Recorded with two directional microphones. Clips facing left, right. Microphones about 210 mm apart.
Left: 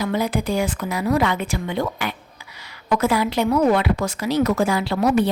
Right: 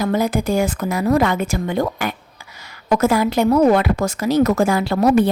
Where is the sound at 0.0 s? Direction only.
45° right (ahead or behind).